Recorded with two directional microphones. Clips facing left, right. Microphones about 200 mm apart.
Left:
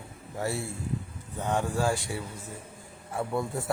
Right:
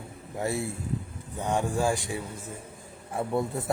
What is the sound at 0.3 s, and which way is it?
Speech, 20° right (ahead or behind).